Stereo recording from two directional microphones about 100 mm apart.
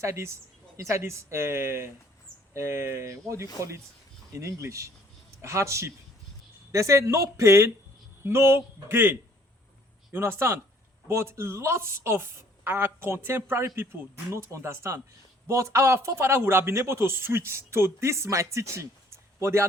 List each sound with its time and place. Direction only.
0.0 s a man's voice: 30° right (ahead or behind)